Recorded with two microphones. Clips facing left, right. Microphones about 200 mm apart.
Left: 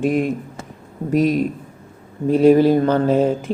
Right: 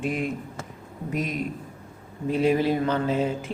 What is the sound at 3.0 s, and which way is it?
Speech, 55° left (ahead or behind).